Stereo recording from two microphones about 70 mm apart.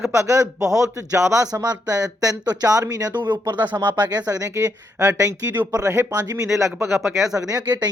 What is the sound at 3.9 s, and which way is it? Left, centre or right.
Speech, right.